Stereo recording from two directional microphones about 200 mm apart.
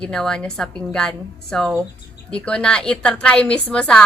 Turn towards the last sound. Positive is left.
turn(degrees=5)  # may be behind; listen again after turning